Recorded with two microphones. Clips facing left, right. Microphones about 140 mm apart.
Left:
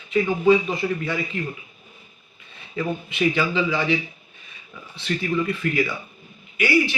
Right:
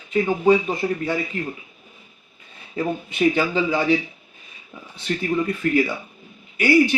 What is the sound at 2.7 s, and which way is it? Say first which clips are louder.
A man's voice: right 2 dB; 40° right (ahead or behind).